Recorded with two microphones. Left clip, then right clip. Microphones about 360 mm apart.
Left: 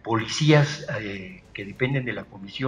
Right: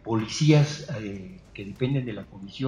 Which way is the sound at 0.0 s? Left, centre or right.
Left.